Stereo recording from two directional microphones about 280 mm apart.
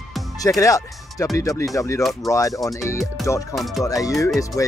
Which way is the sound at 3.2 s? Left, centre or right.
Centre.